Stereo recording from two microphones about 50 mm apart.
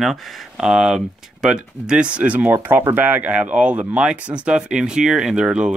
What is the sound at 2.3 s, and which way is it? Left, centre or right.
Speech, right.